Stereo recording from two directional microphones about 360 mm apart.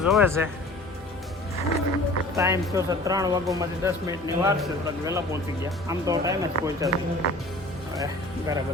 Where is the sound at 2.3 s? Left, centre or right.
Centre.